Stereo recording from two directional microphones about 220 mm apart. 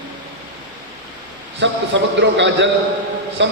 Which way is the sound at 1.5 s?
55° right (ahead or behind).